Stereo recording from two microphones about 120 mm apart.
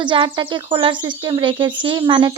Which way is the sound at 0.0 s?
40° right (ahead or behind).